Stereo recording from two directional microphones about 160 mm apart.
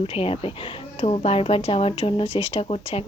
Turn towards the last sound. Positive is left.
turn(degrees=40)  # may be behind; listen again after turning